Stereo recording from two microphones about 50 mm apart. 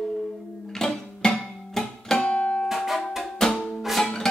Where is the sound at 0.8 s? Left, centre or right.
Centre.